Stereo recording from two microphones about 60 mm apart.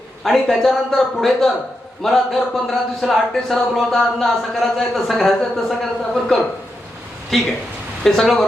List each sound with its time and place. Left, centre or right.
0.3 s speech: centre
8.0 s speech: centre